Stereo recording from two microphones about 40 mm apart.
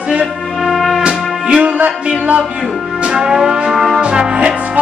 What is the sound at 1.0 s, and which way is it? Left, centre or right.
Music, right.